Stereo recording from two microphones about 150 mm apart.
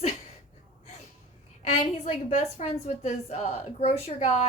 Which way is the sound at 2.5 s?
45° left (ahead or behind).